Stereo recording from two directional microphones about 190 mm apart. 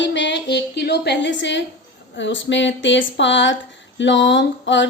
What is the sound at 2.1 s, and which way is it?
A woman's voice, 75° left (ahead or behind).